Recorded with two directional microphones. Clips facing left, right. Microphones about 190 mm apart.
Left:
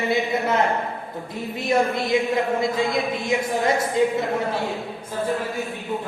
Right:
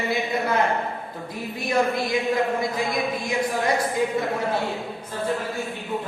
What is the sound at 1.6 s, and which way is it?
Speech, 25° left (ahead or behind).